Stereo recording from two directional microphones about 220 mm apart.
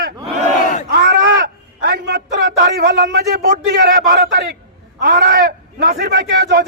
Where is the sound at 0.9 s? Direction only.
50° right (ahead or behind).